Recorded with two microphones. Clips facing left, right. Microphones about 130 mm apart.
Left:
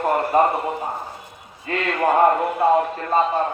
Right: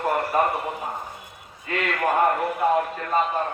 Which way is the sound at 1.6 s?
30° left (ahead or behind).